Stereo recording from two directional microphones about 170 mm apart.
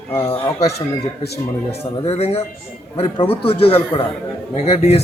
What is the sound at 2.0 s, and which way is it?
A man's voice, 35° left (ahead or behind).